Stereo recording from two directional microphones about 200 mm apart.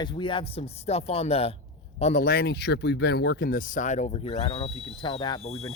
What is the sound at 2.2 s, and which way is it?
Speech, 50° left (ahead or behind).